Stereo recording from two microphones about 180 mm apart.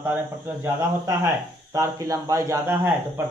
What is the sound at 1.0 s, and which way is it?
Speech, 15° right (ahead or behind).